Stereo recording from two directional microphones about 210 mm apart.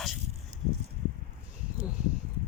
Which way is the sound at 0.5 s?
35° right (ahead or behind).